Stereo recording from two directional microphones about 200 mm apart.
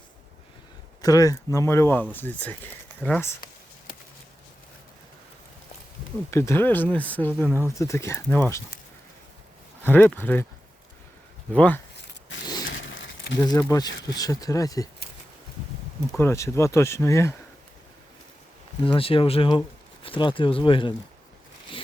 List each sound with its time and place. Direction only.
1.0 s speech: 15° left (ahead or behind)
6.3 s speech: 15° left (ahead or behind)
7.4 s speech: 10° right (ahead or behind)
7.8 s speech: 15° left (ahead or behind)
9.8 s speech: 10° left (ahead or behind)
11.5 s speech: 5° left (ahead or behind)
12.6 s a sound: 70° left (ahead or behind)
13.4 s speech: 15° left (ahead or behind)
16.1 s speech: 15° left (ahead or behind)
18.9 s speech: 25° left (ahead or behind)